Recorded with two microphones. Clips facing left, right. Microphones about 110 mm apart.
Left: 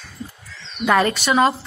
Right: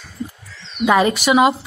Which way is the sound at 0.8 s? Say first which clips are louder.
Right 3 dB; 10° right (ahead or behind).